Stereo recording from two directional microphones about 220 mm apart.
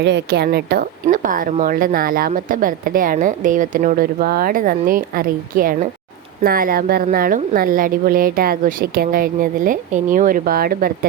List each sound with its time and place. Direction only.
0.0 s speech: 50° right (ahead or behind)